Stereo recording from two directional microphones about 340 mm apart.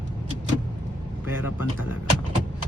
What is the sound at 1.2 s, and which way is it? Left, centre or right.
Vehicle, centre.